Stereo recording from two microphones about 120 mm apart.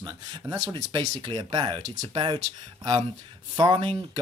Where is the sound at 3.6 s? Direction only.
40° right (ahead or behind).